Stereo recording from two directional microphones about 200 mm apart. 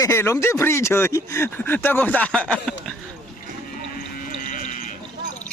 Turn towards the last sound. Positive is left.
turn(degrees=40)  # may be behind; listen again after turning